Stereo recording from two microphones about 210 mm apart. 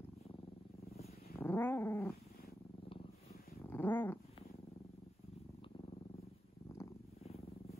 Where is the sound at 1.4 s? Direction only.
10° left (ahead or behind).